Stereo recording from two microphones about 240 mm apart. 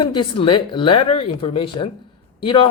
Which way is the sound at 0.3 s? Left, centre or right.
Left.